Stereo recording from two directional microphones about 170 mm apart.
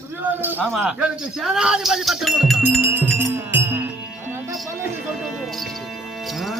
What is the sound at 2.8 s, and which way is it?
Speech, 10° right (ahead or behind).